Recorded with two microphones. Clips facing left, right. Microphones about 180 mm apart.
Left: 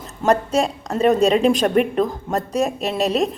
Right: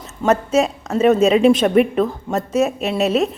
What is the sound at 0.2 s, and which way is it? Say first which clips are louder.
A woman's voice: right 2 dB; 5° right (ahead or behind).